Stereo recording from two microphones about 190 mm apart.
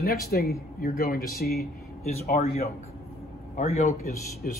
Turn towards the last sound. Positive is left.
turn(degrees=50)  # may be behind; listen again after turning